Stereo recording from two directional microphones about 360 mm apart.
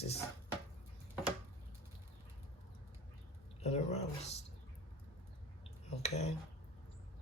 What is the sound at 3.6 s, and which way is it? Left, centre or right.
Speech, centre.